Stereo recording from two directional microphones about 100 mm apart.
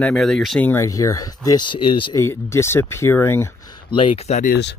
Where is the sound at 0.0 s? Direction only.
5° left (ahead or behind).